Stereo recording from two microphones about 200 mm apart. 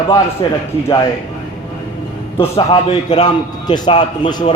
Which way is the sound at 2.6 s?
30° left (ahead or behind).